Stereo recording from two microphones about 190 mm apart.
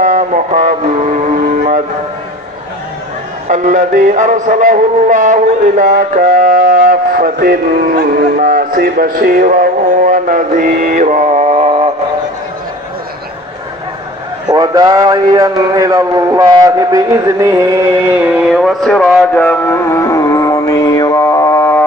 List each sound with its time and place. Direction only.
0.0 s speech: 40° right (ahead or behind)
3.4 s music: 40° right (ahead or behind)
14.5 s a man's voice: 20° right (ahead or behind); by 19.4 s centre (ahead or behind)
19.4 s music: 10° left (ahead or behind)